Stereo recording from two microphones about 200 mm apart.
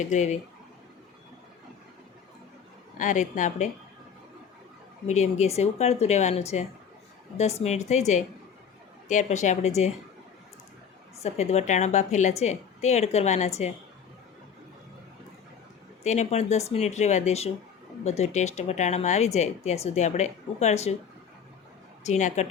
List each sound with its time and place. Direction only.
0.0 s speech: 35° left (ahead or behind)
3.0 s speech: 40° left (ahead or behind)
5.0 s speech: 35° left (ahead or behind)
11.2 s speech: 35° left (ahead or behind)
16.0 s speech: 35° left (ahead or behind)
22.0 s speech: 35° left (ahead or behind)